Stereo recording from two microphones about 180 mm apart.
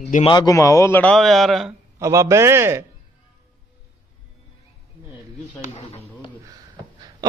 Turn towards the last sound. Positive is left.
turn(degrees=-20)  # may be behind; listen again after turning